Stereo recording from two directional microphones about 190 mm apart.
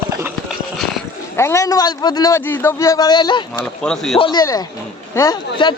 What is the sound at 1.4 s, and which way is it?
Speech, 15° left (ahead or behind).